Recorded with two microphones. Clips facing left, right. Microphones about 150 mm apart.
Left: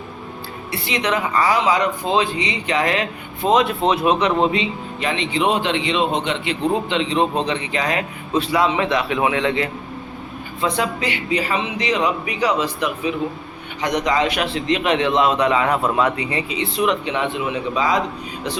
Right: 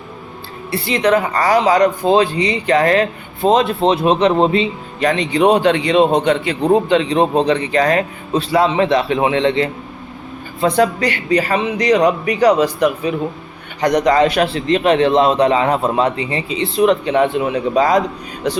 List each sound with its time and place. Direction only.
0.7 s a woman's voice: 35° right (ahead or behind)
10.6 s a woman's voice: 40° right (ahead or behind)